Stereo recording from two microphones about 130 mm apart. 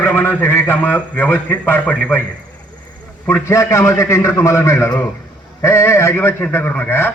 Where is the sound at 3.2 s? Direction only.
20° left (ahead or behind).